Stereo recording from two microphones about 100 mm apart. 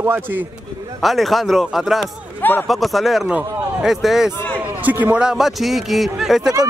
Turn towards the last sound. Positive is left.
turn(degrees=-5)  # may be behind; listen again after turning